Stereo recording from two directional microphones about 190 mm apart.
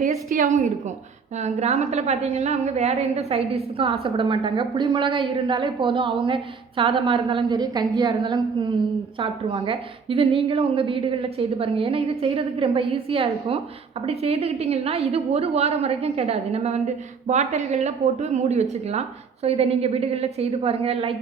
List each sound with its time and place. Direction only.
0.0 s a woman's voice: 45° right (ahead or behind); by 21.2 s 30° right (ahead or behind)